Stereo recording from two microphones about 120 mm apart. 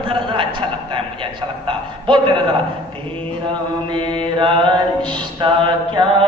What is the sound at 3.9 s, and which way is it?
Mantra, 40° right (ahead or behind).